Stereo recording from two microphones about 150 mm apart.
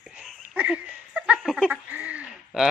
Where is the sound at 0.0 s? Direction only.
5° right (ahead or behind).